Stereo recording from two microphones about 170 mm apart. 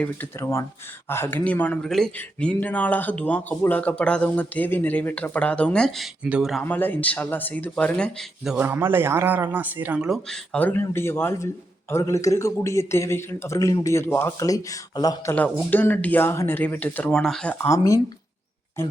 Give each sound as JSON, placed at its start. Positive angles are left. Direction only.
{"t": 0.0, "sound": "speech", "side_deg": 10}
{"t": 6.6, "sound": "speech", "side_deg": 10}
{"t": 15.7, "sound": "speech", "side_deg": 10}